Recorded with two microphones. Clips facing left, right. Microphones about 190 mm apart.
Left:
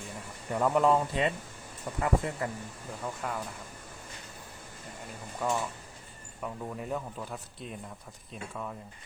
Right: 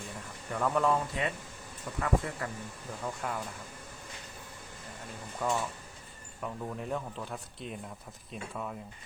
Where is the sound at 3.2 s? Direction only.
Centre (ahead or behind).